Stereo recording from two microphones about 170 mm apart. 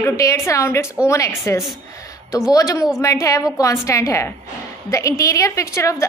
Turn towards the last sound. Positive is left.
turn(degrees=15)  # may be behind; listen again after turning